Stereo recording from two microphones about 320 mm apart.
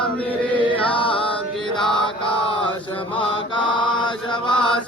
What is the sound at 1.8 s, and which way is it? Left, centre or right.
Mantra, centre.